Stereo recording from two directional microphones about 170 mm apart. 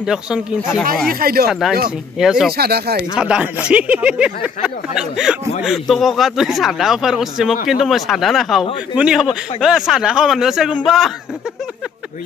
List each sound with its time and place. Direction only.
0.0 s speech: 5° right (ahead or behind)
1.0 s speech: 60° right (ahead or behind)
1.5 s speech: centre (ahead or behind)
2.5 s speech: 70° right (ahead or behind)
3.2 s speech: 5° right (ahead or behind)